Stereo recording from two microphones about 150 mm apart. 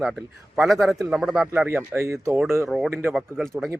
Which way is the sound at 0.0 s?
Centre (ahead or behind).